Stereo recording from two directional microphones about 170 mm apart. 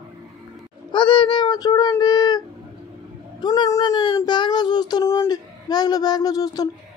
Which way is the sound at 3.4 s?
25° left (ahead or behind).